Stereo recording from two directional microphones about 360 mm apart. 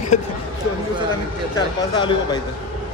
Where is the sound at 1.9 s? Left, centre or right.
Centre.